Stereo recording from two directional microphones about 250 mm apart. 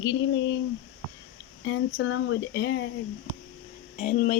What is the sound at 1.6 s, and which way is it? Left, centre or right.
Speech, left.